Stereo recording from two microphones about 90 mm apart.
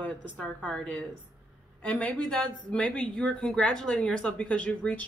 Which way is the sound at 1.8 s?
15° left (ahead or behind).